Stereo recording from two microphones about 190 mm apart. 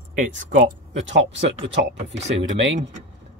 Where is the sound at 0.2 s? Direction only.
45° right (ahead or behind).